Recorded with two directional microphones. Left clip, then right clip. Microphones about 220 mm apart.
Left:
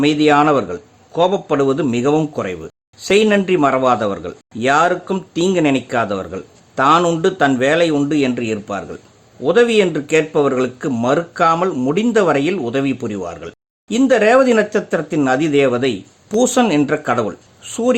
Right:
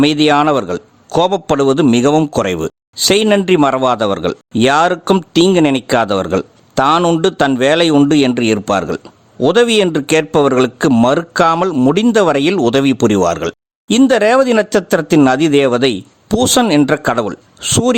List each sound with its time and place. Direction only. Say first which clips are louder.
0.0 s speech: right 2 dB; 45° right (ahead or behind)